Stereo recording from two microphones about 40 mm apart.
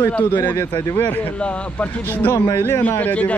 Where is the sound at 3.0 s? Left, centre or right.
Left.